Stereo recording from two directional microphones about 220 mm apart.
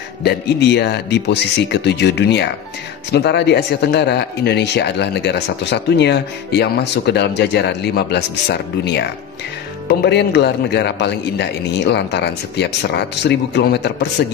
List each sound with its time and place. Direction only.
0.2 s speech: 50° left (ahead or behind)